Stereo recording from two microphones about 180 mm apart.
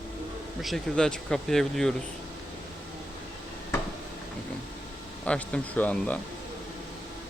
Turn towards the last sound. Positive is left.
turn(degrees=10)  # may be behind; listen again after turning